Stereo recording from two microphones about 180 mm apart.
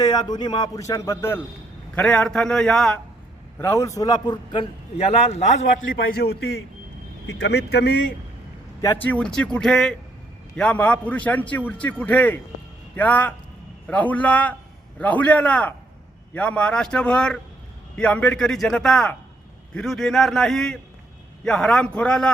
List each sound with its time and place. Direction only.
0.0 s a man's voice: 20° left (ahead or behind); by 3.0 s 5° left (ahead or behind)
3.6 s a man's voice: 15° left (ahead or behind); by 6.0 s 40° left (ahead or behind)
6.1 s speech: 65° left (ahead or behind)
8.8 s a man's voice: 10° left (ahead or behind)